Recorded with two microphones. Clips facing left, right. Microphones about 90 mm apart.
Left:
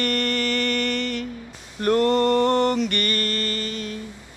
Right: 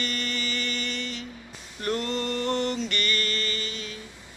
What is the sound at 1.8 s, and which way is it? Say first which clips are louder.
Mantra: left 10 dB; 50° left (ahead or behind).